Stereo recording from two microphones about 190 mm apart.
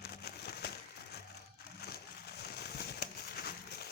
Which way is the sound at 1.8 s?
60° left (ahead or behind).